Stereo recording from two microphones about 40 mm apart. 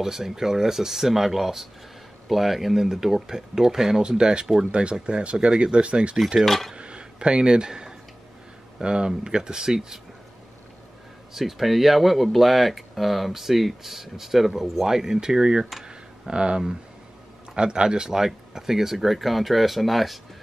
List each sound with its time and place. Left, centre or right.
0.0 s speech: centre; by 6.1 s right
6.4 s speech: centre
6.7 s a sound: right
8.7 s speech: centre
11.3 s speech: centre
15.8 s computer keyboard: centre
17.6 s speech: right; by 20.2 s centre